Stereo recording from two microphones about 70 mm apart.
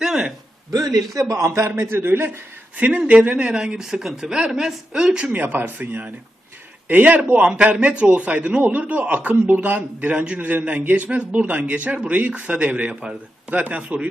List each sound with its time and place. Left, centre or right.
0.0 s a sound: centre
0.7 s a man's voice: right
2.8 s speech: centre
5.2 s a man's voice: right